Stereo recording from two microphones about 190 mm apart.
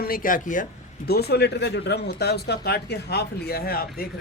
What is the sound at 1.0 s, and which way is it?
Speech, 55° left (ahead or behind).